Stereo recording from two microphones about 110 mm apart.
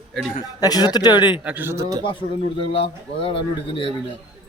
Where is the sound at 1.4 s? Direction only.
20° right (ahead or behind).